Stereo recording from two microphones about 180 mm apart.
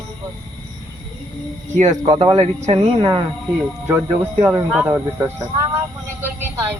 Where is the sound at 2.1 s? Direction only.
25° right (ahead or behind).